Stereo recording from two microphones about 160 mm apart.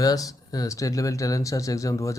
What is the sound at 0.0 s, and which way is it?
Speech, 20° left (ahead or behind).